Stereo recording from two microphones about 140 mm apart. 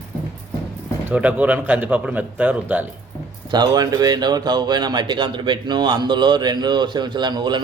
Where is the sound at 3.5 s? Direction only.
30° right (ahead or behind).